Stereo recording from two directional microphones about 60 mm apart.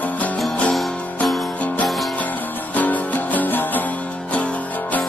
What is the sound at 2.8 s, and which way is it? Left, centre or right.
Music, left.